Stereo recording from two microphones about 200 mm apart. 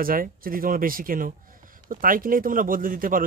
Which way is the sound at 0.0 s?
45° right (ahead or behind).